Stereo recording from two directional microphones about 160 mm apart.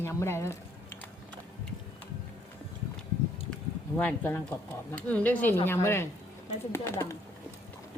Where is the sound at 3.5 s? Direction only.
10° left (ahead or behind).